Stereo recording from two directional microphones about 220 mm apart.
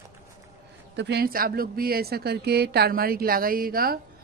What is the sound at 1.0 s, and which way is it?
A woman's voice, 50° right (ahead or behind).